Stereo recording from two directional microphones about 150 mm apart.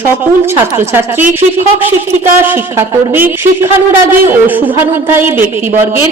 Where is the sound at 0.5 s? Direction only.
15° right (ahead or behind).